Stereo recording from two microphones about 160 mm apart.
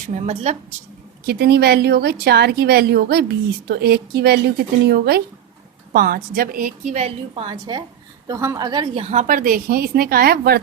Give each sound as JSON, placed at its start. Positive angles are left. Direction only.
{"t": 0.1, "sound": "a woman's voice", "side_deg": -45}
{"t": 1.3, "sound": "a woman's voice", "side_deg": -85}
{"t": 5.9, "sound": "a woman's voice", "side_deg": -70}
{"t": 9.0, "sound": "a woman's voice", "side_deg": -50}